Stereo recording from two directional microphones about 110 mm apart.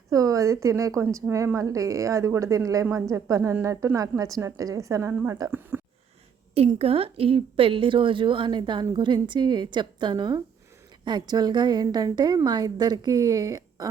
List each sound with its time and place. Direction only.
0.1 s a woman's voice: 30° right (ahead or behind)
6.7 s a woman's voice: 60° right (ahead or behind); by 13.8 s 35° right (ahead or behind)